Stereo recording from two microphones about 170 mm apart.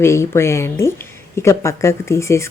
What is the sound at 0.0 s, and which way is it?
Speech, 15° left (ahead or behind).